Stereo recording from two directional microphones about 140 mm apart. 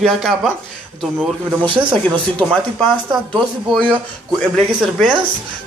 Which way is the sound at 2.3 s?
5° left (ahead or behind).